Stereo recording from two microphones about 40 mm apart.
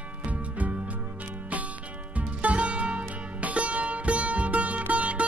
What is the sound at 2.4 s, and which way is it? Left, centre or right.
Music, right.